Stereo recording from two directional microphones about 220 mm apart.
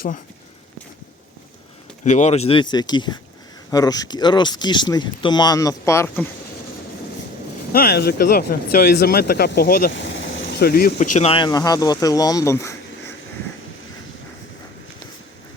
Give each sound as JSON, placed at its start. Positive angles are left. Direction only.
{"t": 2.0, "sound": "speech", "side_deg": 30}
{"t": 7.7, "sound": "speech", "side_deg": 45}
{"t": 10.2, "sound": "speech", "side_deg": 50}